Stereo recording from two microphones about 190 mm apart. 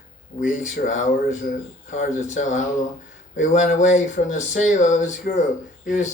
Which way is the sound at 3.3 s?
40° left (ahead or behind).